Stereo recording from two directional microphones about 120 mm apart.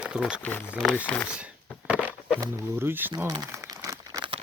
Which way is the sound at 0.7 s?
Centre (ahead or behind).